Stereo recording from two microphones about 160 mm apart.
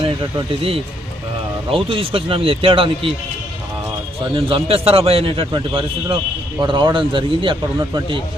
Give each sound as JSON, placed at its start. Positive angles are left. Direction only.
{"t": 0.0, "sound": "a man's voice", "side_deg": -35}
{"t": 4.4, "sound": "a man's voice", "side_deg": -35}